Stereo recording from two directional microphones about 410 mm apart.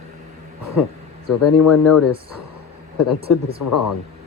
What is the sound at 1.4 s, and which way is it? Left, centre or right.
A woman's voice, left.